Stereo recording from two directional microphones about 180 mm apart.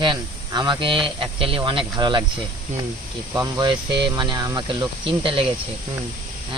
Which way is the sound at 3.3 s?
20° right (ahead or behind).